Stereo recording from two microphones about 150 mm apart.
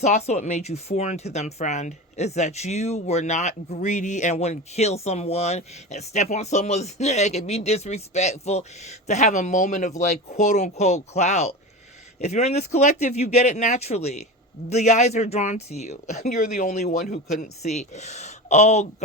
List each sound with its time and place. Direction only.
0.0 s speech: 50° left (ahead or behind)
16.8 s speech: 70° left (ahead or behind); by 19.0 s 50° left (ahead or behind)